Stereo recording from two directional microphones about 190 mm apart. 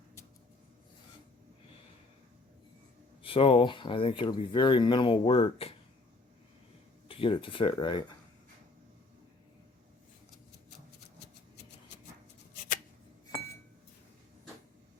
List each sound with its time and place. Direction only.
3.2 s speech: 30° left (ahead or behind)
7.1 s speech: 30° left (ahead or behind)